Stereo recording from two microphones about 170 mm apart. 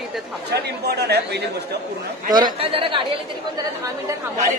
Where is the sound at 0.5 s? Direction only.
75° right (ahead or behind).